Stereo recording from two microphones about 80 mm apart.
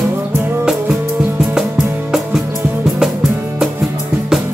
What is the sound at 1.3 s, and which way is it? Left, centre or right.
Music, centre.